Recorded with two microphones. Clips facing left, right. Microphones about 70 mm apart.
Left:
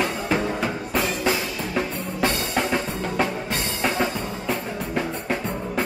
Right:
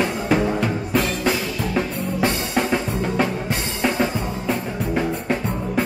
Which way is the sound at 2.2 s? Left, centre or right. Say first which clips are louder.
Right 2 dB; centre.